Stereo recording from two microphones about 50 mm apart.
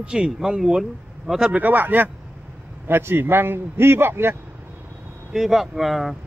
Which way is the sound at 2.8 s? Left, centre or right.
Right.